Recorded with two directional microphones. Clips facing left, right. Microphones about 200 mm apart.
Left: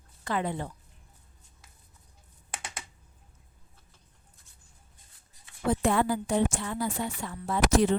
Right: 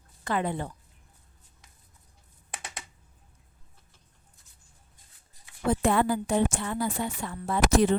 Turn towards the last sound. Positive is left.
turn(degrees=-55)  # may be behind; listen again after turning